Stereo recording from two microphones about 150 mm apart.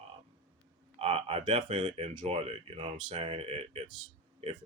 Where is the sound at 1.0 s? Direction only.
40° right (ahead or behind).